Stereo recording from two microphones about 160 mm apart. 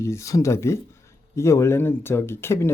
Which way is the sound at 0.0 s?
20° left (ahead or behind).